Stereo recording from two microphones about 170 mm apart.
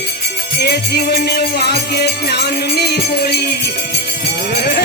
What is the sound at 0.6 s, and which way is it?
Music, 75° left (ahead or behind).